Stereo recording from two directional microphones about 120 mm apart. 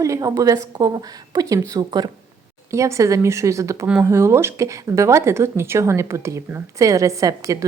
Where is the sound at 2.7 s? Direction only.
25° right (ahead or behind).